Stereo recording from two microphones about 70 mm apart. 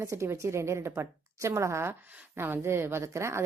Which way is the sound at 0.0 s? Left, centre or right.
Right.